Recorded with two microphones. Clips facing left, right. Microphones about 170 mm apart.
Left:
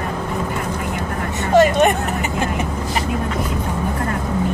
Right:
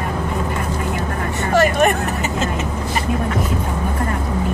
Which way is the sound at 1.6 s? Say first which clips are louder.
Left 2 dB; 20° left (ahead or behind).